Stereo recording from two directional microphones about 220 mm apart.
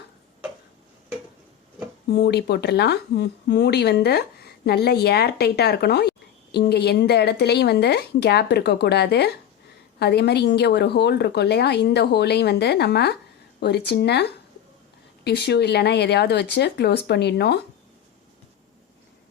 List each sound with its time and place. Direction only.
2.0 s a woman's voice: 50° left (ahead or behind)